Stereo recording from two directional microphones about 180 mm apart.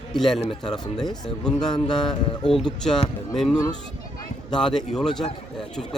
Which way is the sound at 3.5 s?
20° left (ahead or behind).